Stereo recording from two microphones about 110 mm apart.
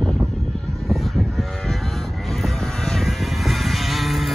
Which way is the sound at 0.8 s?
Centre (ahead or behind).